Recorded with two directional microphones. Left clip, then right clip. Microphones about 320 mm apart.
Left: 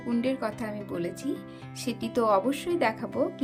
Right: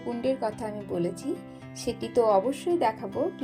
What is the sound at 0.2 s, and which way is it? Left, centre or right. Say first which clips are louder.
Speech: right 3 dB; centre.